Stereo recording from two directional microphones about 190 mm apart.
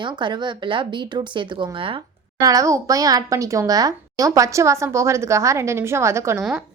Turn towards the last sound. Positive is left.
turn(degrees=-15)  # may be behind; listen again after turning